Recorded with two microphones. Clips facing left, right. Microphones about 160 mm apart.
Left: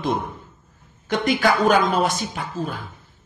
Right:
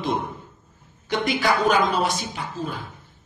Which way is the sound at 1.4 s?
50° left (ahead or behind).